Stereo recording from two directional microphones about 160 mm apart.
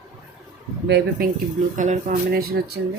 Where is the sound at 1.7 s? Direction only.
50° right (ahead or behind); by 2.8 s 75° right (ahead or behind).